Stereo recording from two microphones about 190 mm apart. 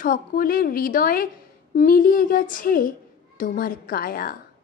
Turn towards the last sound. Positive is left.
turn(degrees=50)  # may be behind; listen again after turning